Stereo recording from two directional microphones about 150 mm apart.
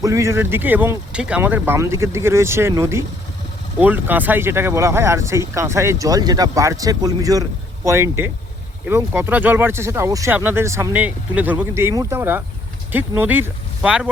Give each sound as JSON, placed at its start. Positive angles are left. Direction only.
{"t": 0.0, "sound": "speech", "side_deg": -20}